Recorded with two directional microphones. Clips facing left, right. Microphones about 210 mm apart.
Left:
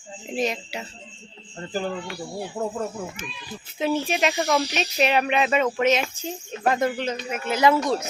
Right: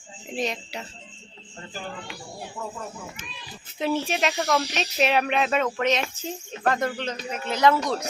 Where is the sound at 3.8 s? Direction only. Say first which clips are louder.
Left 2 dB; centre (ahead or behind).